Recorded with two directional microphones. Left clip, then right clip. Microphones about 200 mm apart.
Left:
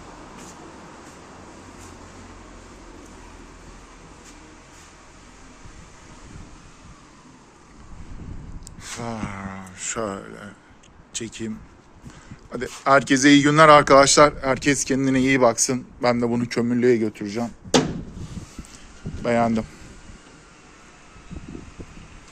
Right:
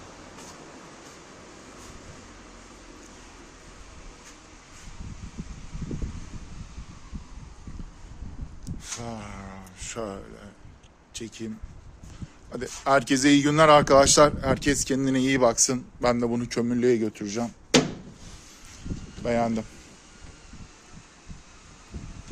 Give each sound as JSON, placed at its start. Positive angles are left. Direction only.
{"t": 9.0, "sound": "speech", "side_deg": -5}
{"t": 19.2, "sound": "speech", "side_deg": -10}